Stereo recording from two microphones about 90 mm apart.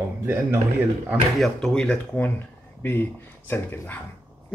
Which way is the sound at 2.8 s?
25° left (ahead or behind).